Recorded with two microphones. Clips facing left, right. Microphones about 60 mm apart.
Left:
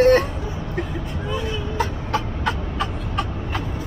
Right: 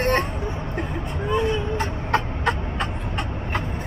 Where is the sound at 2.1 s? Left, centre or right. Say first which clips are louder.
Right 1 dB; right.